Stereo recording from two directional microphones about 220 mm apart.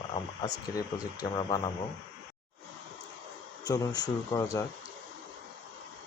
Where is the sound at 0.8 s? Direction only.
20° left (ahead or behind).